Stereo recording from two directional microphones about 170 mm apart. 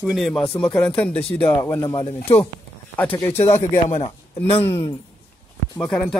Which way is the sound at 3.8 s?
40° left (ahead or behind).